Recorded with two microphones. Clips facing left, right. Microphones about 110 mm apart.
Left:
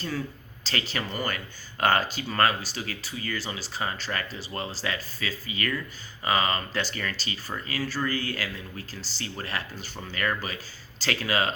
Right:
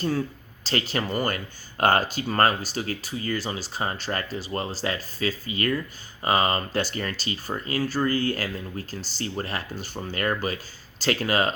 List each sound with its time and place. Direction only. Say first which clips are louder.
0.7 s speech: right 5 dB; 40° right (ahead or behind)